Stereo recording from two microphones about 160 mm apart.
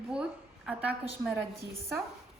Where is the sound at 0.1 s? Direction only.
5° right (ahead or behind).